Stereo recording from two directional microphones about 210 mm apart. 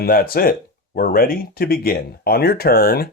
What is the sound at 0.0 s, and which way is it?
Speech, 45° left (ahead or behind).